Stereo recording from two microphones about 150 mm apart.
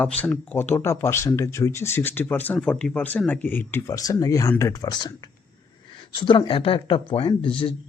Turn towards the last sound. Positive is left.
turn(degrees=35)  # may be behind; listen again after turning